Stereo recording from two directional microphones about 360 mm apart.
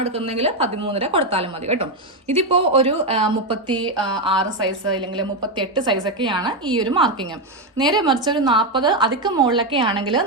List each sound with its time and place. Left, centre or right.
0.0 s a woman's voice: centre